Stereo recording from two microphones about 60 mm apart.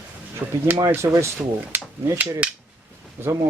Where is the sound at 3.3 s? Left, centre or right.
Right.